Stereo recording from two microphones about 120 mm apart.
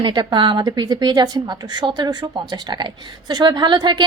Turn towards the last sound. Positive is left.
turn(degrees=-40)  # may be behind; listen again after turning